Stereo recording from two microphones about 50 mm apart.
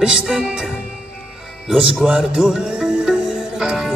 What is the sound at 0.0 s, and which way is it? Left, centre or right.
Music, centre.